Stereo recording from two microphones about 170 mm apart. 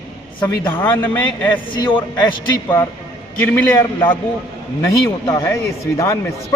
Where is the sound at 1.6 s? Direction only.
30° left (ahead or behind).